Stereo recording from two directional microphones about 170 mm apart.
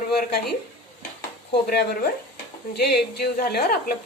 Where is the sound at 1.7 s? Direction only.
65° left (ahead or behind).